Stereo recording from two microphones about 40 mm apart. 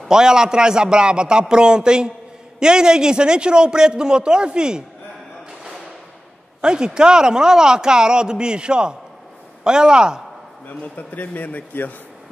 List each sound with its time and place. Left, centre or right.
0.1 s speech: centre
6.6 s speech: right
10.7 s a man's voice: left